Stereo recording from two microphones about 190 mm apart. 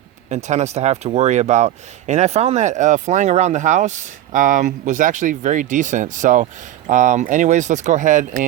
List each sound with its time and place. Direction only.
0.3 s speech: 35° right (ahead or behind)